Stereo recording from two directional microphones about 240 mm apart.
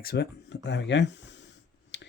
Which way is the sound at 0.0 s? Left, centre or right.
Left.